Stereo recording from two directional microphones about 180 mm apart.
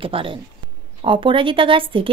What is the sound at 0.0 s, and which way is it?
Speech, 30° right (ahead or behind).